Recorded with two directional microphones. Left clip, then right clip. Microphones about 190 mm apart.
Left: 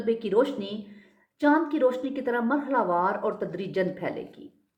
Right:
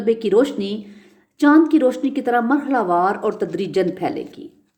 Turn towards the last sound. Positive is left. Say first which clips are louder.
# right 8 dB
turn(degrees=-55)  # may be behind; listen again after turning